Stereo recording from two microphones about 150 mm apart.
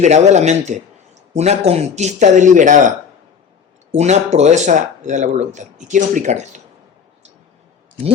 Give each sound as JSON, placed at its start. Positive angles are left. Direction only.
{"t": 0.0, "sound": "speech", "side_deg": -50}
{"t": 3.9, "sound": "speech", "side_deg": -50}